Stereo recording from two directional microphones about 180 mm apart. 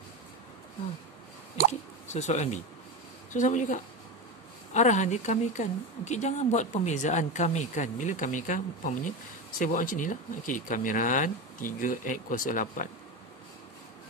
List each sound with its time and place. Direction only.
1.7 s speech: 40° left (ahead or behind)